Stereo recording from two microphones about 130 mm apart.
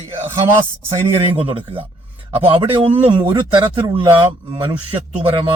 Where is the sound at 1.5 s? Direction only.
45° right (ahead or behind).